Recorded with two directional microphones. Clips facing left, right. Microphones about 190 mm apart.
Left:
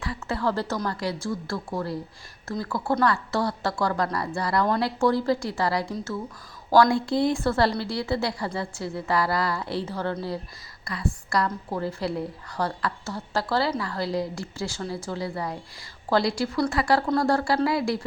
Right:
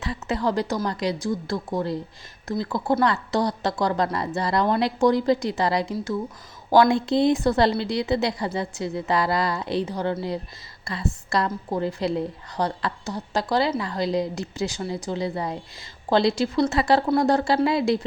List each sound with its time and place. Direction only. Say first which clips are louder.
0.0 s a woman's voice: right 2 dB; 20° right (ahead or behind)